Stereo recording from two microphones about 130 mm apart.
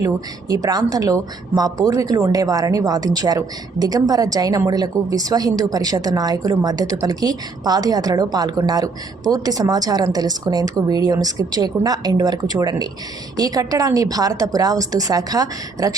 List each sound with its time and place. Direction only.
0.0 s a woman's voice: 25° right (ahead or behind)